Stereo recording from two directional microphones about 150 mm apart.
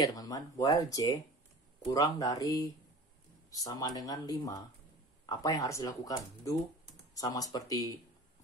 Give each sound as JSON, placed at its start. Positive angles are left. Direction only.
{"t": 0.0, "sound": "speech", "side_deg": 25}